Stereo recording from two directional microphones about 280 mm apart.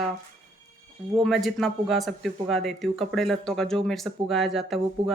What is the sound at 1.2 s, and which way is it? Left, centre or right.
A woman's voice, centre.